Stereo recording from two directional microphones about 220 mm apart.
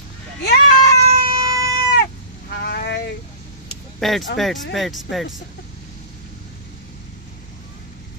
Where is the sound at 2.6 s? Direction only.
50° left (ahead or behind).